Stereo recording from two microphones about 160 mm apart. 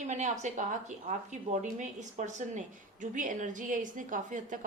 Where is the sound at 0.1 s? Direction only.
50° right (ahead or behind).